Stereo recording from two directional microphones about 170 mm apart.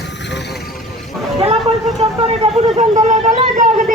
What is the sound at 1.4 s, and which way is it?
A man's voice, 35° right (ahead or behind).